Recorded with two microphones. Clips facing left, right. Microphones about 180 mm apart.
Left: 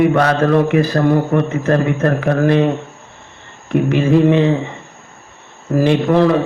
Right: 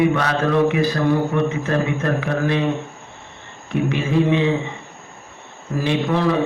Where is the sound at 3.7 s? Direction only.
50° left (ahead or behind).